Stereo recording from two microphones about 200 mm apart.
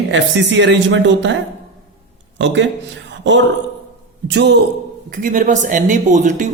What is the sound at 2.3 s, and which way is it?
Speech, 65° right (ahead or behind).